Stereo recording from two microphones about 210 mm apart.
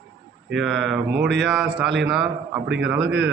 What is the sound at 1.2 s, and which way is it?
Speech, 55° right (ahead or behind).